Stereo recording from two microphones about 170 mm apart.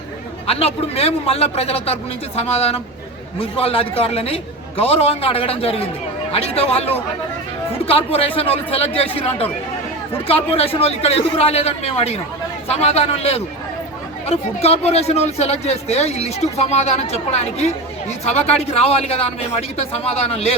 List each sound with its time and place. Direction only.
0.4 s speech: 35° left (ahead or behind)